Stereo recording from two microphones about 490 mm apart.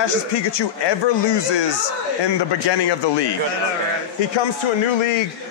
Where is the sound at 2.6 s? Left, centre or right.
Left.